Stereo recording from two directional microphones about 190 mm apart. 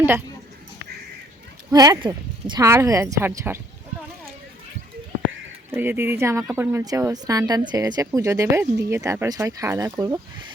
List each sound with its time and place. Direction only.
1.7 s speech: 20° right (ahead or behind)
5.7 s speech: 10° right (ahead or behind)